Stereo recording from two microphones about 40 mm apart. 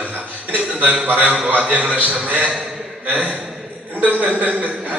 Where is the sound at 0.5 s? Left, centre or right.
Right.